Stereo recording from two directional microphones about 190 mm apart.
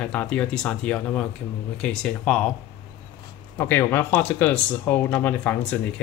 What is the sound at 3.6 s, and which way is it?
Speech, 10° left (ahead or behind).